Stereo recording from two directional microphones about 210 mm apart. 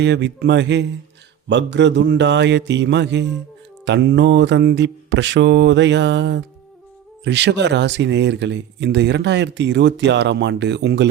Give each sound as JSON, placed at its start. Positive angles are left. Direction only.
{"t": 0.0, "sound": "speech", "side_deg": -55}